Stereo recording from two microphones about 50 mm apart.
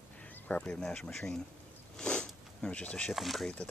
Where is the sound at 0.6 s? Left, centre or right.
Centre.